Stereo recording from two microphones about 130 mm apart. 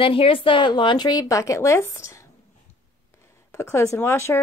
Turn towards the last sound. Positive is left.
turn(degrees=20)  # may be behind; listen again after turning